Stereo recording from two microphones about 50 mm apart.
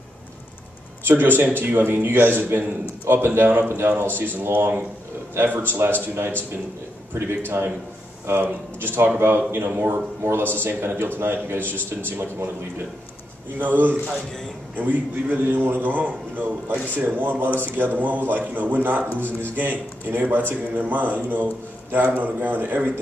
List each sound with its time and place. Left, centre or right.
1.0 s a man's voice: right
7.2 s a man's voice: right
10.2 s a man's voice: right
13.6 s a man's voice: right